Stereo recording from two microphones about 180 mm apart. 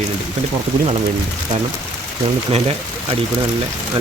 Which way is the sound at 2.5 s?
35° right (ahead or behind).